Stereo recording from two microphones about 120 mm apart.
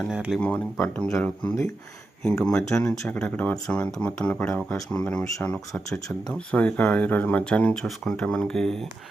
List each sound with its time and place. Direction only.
0.1 s speech: 5° right (ahead or behind)
0.3 s speech: 10° left (ahead or behind)
2.5 s speech: 25° left (ahead or behind)
2.7 s speech: 5° left (ahead or behind)